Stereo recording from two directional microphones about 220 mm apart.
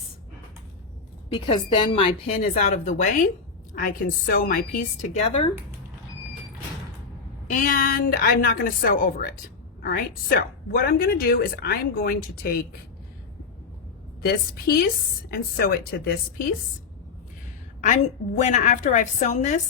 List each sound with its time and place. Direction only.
1.3 s a woman's voice: 25° left (ahead or behind)
7.5 s speech: 40° left (ahead or behind)
14.2 s a woman's voice: 45° left (ahead or behind)
17.7 s speech: 35° left (ahead or behind)